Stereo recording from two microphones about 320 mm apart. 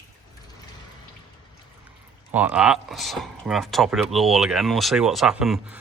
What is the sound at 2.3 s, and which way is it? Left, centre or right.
Speech, centre.